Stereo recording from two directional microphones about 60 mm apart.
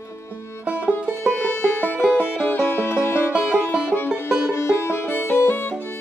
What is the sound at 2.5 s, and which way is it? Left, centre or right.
Music, left.